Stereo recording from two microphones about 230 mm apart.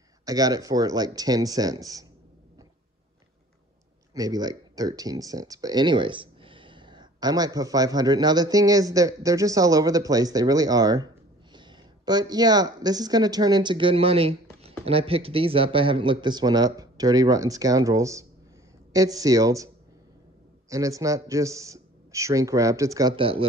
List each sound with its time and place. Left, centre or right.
0.2 s speech: centre
4.1 s speech: centre
20.7 s speech: centre